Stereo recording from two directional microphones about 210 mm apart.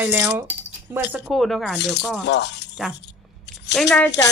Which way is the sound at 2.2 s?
55° left (ahead or behind).